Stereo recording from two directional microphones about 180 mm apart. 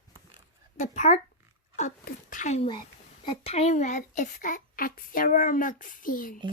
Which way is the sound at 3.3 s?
35° left (ahead or behind).